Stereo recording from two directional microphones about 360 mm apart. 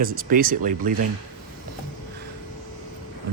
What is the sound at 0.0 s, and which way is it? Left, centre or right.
Speech, right.